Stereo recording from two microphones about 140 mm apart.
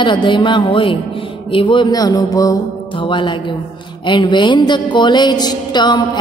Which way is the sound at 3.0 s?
35° left (ahead or behind).